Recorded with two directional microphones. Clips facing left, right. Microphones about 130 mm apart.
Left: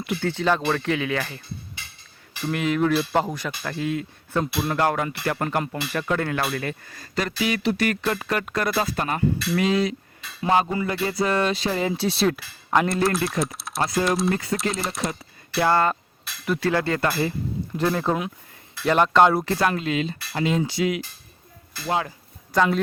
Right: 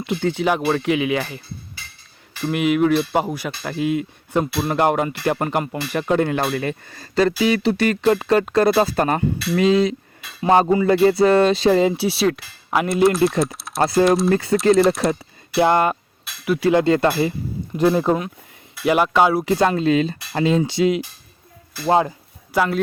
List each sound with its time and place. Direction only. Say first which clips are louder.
0.0 s speech: right 4 dB; 20° right (ahead or behind)
2.4 s speech: right 5 dB; 15° right (ahead or behind); by 9.2 s 40° right (ahead or behind)
9.6 s speech: right 7 dB; 25° right (ahead or behind)
11.9 s speech: right 3 dB; 5° right (ahead or behind)
13.4 s typing: right 5 dB; centre (ahead or behind)
14.5 s speech: right 11 dB; centre (ahead or behind)
15.5 s speech: right 4 dB; 15° right (ahead or behind)
19.5 s speech: right 6 dB; 25° right (ahead or behind)
22.5 s speech: right 1 dB; 5° right (ahead or behind)